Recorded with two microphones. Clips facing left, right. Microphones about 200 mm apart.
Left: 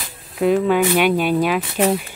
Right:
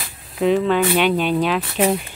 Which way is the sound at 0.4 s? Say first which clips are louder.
Left 1 dB; 10° left (ahead or behind).